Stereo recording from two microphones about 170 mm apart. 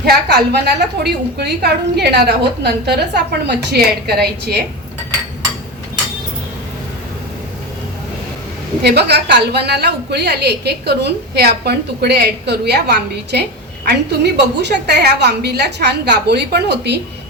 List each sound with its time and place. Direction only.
0.0 s a woman's voice: 70° right (ahead or behind)
8.8 s a woman's voice: 75° right (ahead or behind)